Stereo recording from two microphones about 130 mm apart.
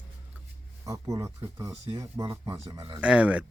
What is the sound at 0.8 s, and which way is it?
Speech, 25° right (ahead or behind).